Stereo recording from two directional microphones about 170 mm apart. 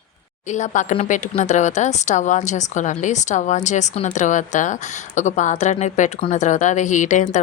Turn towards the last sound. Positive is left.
turn(degrees=45)  # may be behind; listen again after turning